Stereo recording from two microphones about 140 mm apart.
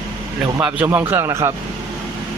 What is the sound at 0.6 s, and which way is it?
Speech, 10° right (ahead or behind).